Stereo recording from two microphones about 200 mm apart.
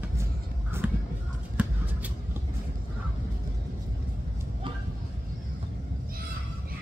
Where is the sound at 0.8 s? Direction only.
10° right (ahead or behind).